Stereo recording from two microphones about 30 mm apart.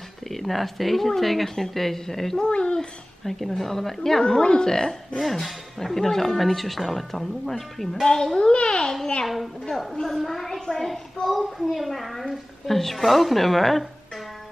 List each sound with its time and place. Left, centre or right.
0.3 s a woman's voice: centre
2.4 s speech: left
3.3 s a woman's voice: centre
4.2 s speech: left
5.2 s speech: centre
8.4 s speech: left
9.2 s speech: centre